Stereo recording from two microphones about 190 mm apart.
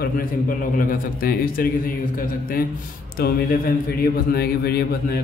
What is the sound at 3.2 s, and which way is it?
A man's voice, 50° left (ahead or behind).